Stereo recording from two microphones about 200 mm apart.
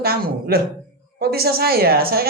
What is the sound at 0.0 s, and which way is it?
Speech, 50° right (ahead or behind).